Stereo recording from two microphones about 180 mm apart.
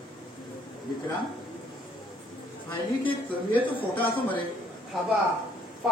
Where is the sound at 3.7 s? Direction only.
30° left (ahead or behind).